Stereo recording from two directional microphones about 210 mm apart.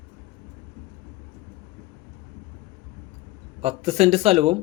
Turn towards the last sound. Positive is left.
turn(degrees=-30)  # may be behind; listen again after turning